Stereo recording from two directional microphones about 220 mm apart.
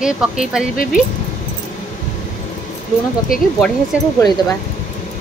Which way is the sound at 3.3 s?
40° left (ahead or behind).